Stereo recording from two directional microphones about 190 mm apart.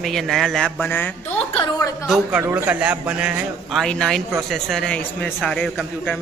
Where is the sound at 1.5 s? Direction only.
20° left (ahead or behind).